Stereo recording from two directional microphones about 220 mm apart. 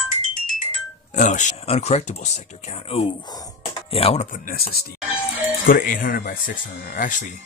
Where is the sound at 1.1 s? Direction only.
35° left (ahead or behind).